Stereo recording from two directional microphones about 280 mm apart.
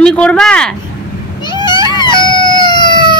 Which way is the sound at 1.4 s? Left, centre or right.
Centre.